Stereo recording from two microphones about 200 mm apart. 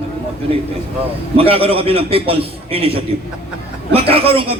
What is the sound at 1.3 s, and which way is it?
A man's voice, 30° right (ahead or behind).